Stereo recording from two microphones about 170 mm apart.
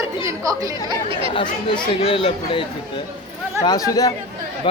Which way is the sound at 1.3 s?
30° left (ahead or behind).